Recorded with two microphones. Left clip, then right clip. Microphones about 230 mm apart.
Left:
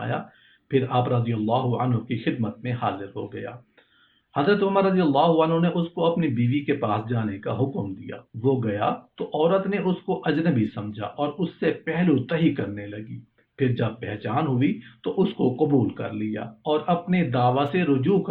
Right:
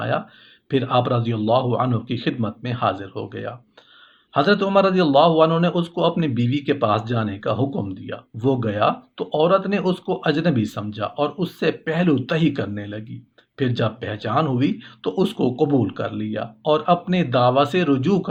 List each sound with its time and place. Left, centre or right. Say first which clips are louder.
0.7 s speech: right 3 dB; right
4.4 s speech: right 4 dB; right